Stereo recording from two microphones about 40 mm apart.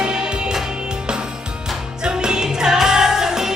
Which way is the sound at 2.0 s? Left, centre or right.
Centre.